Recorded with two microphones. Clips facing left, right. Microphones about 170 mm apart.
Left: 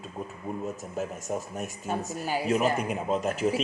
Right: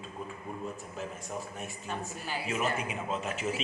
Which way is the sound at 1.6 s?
40° left (ahead or behind).